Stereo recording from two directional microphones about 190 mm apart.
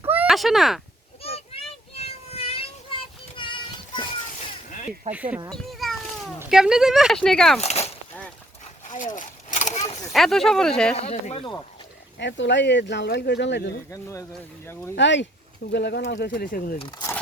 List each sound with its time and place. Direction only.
0.0 s a sound: 10° right (ahead or behind)
1.2 s child singing: 30° left (ahead or behind)
5.1 s speech: 5° right (ahead or behind)
5.5 s a sound: centre (ahead or behind)
6.4 s speech: 5° right (ahead or behind)
7.6 s a sound: 35° left (ahead or behind)
10.1 s speech: centre (ahead or behind)
10.9 s speech: 35° left (ahead or behind)
12.2 s speech: 70° left (ahead or behind)
13.9 s speech: 15° left (ahead or behind)
14.9 s speech: 70° left (ahead or behind); by 16.7 s 50° left (ahead or behind)
16.7 s speech: 25° left (ahead or behind)